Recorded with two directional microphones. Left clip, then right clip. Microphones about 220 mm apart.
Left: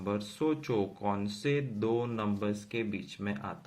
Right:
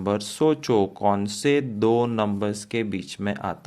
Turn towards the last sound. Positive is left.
turn(degrees=-40)  # may be behind; listen again after turning